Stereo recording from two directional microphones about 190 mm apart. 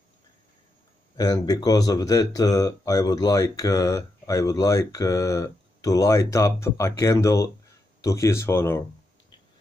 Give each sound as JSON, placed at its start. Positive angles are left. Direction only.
{"t": 1.1, "sound": "speech", "side_deg": 20}